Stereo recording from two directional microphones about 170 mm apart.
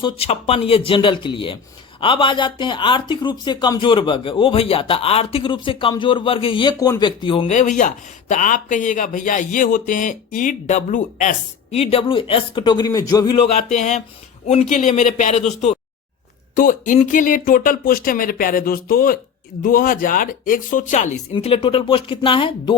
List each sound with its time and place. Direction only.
0.0 s speech: 35° left (ahead or behind)
7.5 s speech: 45° left (ahead or behind)
21.3 s speech: 35° left (ahead or behind)